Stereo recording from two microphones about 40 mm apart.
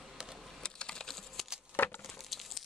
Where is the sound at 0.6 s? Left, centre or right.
Left.